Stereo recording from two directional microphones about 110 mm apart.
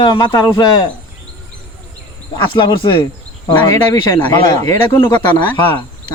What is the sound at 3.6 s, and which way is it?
Speech, 30° left (ahead or behind).